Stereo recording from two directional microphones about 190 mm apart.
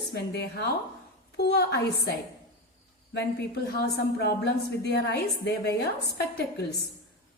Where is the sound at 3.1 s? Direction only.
55° left (ahead or behind).